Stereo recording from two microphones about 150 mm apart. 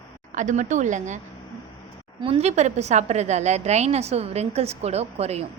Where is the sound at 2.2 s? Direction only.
40° right (ahead or behind).